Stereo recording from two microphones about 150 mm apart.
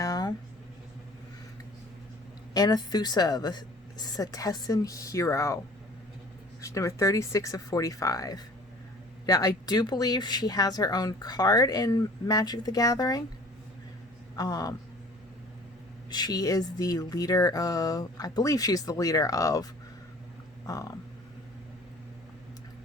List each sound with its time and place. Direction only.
0.0 s a sound: 25° left (ahead or behind)
2.5 s speech: 25° left (ahead or behind)
6.6 s speech: 20° left (ahead or behind)
14.3 s speech: 25° left (ahead or behind)
16.0 s speech: 25° left (ahead or behind)
20.7 s speech: 25° left (ahead or behind)